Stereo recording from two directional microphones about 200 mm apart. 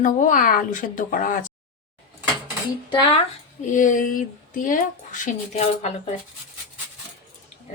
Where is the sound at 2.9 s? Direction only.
25° left (ahead or behind).